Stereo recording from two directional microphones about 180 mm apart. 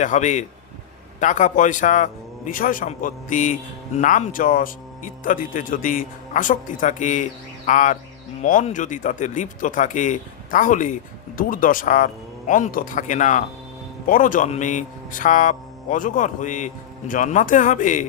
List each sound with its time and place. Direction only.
0.0 s a man's voice: 40° left (ahead or behind)